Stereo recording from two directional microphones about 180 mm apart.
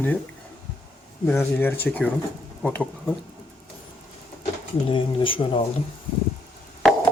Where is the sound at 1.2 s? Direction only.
15° left (ahead or behind).